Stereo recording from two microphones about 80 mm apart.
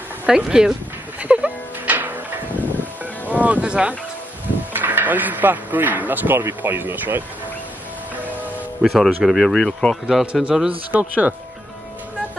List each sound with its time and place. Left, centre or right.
0.3 s a man's voice: centre
1.2 s music: centre
4.7 s speech: right
8.8 s speech: centre
10.0 s a man's voice: centre